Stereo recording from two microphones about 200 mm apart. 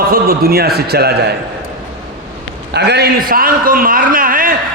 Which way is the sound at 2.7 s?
55° right (ahead or behind).